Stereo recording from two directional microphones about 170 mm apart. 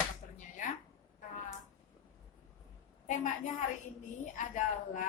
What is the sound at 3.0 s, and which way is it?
Speech, 45° left (ahead or behind).